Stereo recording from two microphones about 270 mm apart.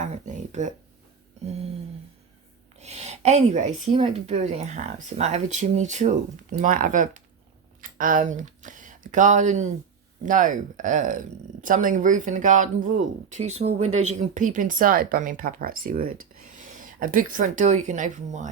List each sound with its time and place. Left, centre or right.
0.0 s speech: right
2.7 s speech: right
16.0 s speech: right
16.6 s speech: right